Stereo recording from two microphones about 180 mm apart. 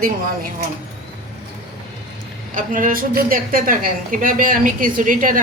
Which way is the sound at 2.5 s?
50° right (ahead or behind).